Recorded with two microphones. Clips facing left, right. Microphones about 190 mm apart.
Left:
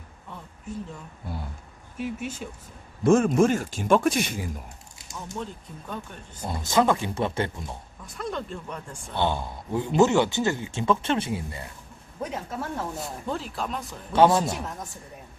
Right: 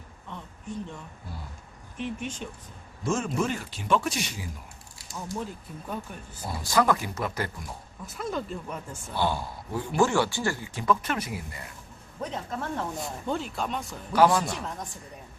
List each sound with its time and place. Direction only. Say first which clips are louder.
0.7 s speech: left 1 dB; 5° left (ahead or behind)
2.0 s speech: left 2 dB; 5° left (ahead or behind)
3.0 s speech: left 9 dB; 55° left (ahead or behind)
5.9 s speech: right 1 dB; 10° right (ahead or behind)
6.4 s speech: left 2 dB; 20° left (ahead or behind)
8.0 s speech: even; centre (ahead or behind)
9.1 s speech: left 2 dB; 20° left (ahead or behind)
12.2 s speech: left 1 dB; 10° left (ahead or behind)
14.1 s speech: left 2 dB; 25° left (ahead or behind)